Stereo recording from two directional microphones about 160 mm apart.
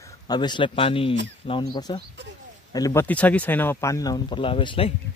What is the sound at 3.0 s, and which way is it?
Speech, 10° left (ahead or behind).